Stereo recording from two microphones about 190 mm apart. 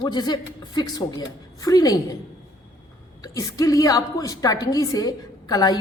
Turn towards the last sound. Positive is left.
turn(degrees=20)  # may be behind; listen again after turning